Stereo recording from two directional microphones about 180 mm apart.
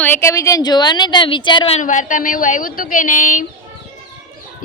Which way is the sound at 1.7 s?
45° left (ahead or behind).